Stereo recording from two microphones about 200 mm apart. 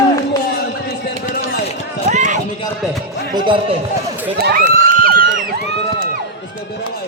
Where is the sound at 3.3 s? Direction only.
25° right (ahead or behind).